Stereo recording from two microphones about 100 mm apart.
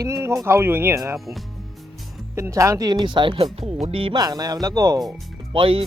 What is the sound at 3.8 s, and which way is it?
Speech, 60° right (ahead or behind).